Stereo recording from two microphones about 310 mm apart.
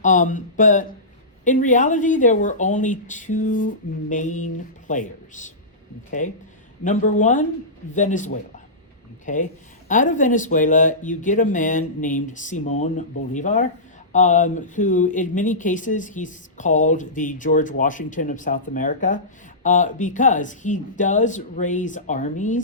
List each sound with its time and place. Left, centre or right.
0.0 s speech: left